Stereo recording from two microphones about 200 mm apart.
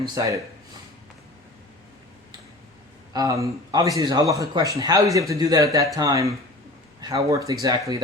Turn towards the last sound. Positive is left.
turn(degrees=-15)  # may be behind; listen again after turning